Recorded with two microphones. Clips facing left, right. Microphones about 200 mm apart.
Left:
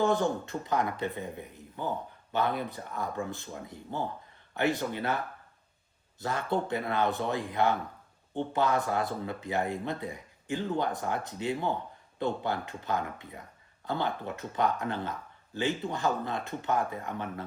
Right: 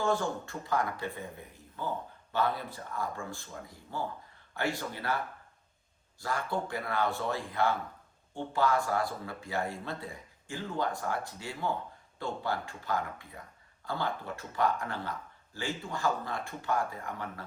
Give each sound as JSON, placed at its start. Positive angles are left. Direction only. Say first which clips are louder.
{"t": 0.0, "sound": "speech", "louder": "left 4 dB", "side_deg": 20}
{"t": 6.1, "sound": "speech", "louder": "left 3 dB", "side_deg": 20}